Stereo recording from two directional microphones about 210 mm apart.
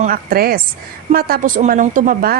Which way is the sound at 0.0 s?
45° right (ahead or behind).